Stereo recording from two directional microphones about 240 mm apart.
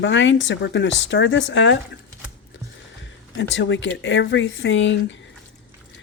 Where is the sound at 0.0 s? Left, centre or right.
Left.